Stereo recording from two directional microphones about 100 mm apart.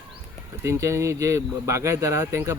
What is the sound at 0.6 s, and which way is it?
Speech, 30° right (ahead or behind).